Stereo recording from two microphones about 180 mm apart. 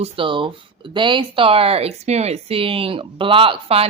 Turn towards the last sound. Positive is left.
turn(degrees=-30)  # may be behind; listen again after turning